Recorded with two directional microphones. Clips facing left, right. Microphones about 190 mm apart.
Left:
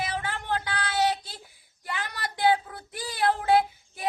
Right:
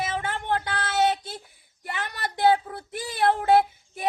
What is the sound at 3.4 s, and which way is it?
Child singing, 50° right (ahead or behind).